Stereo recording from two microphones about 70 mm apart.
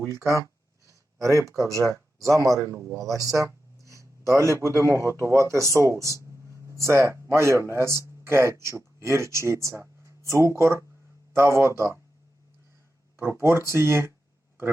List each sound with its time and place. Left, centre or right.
0.0 s speech: right
2.7 s speech: right
3.0 s speech: right
13.1 s speech: right